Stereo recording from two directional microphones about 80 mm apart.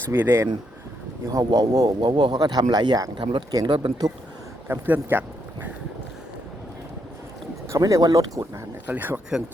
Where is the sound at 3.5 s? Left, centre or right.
Right.